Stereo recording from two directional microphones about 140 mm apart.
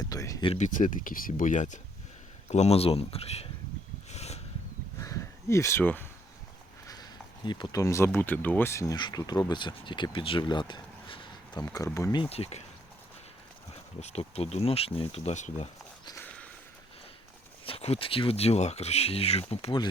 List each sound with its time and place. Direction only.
0.0 s speech: 25° left (ahead or behind)
0.6 s speech: 65° left (ahead or behind)
2.5 s speech: 50° left (ahead or behind)
4.1 s a sound: 50° left (ahead or behind)
4.9 s a sound: 20° left (ahead or behind)
6.8 s speech: 30° left (ahead or behind)
9.0 s speech: 30° left (ahead or behind)
11.6 s speech: 25° left (ahead or behind)
12.1 s speech: 40° left (ahead or behind)
14.0 s speech: 50° left (ahead or behind)
17.7 s speech: 45° left (ahead or behind)